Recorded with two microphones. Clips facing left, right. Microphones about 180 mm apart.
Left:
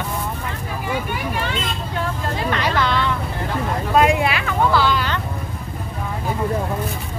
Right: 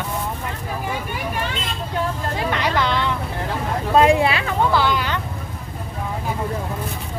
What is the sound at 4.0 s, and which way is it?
Speech, 30° right (ahead or behind).